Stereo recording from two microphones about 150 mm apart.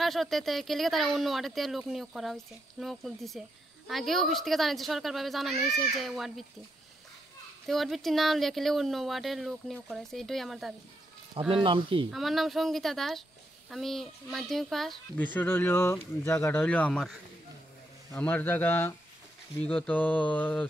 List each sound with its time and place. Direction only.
0.0 s speech: centre (ahead or behind)
7.6 s speech: centre (ahead or behind)
11.3 s speech: 35° right (ahead or behind)
12.1 s speech: centre (ahead or behind)
15.3 s mantra: 15° left (ahead or behind)
18.1 s mantra: 15° left (ahead or behind)